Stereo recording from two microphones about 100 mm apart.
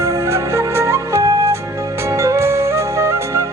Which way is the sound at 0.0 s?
30° right (ahead or behind).